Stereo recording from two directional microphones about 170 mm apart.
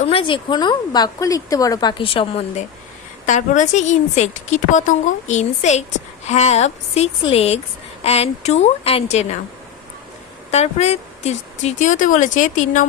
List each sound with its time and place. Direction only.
0.0 s speech: 35° left (ahead or behind)
3.2 s a woman's voice: 45° left (ahead or behind)
10.5 s a woman's voice: 40° left (ahead or behind)